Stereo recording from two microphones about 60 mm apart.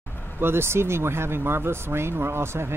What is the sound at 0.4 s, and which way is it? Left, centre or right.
Speech, right.